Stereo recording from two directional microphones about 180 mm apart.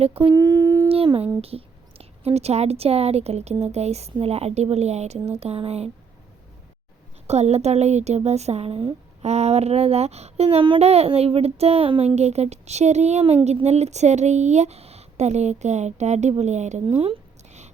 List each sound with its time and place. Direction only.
0.0 s speech: 30° right (ahead or behind)
0.3 s a sound: 20° right (ahead or behind)
0.9 s speech: 30° right (ahead or behind)
7.3 s a woman's voice: 35° right (ahead or behind)